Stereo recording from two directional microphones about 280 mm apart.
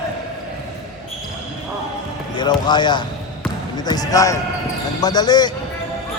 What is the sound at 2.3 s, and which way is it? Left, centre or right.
Speech, centre.